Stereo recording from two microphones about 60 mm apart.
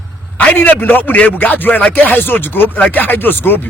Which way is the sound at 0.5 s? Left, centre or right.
Left.